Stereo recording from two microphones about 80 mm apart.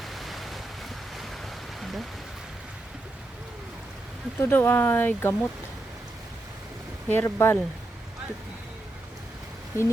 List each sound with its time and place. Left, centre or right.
0.0 s waves: centre
1.8 s a sound: centre
4.4 s speech: left
7.1 s speech: left